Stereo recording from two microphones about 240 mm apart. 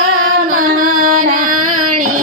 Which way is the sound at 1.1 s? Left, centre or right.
Right.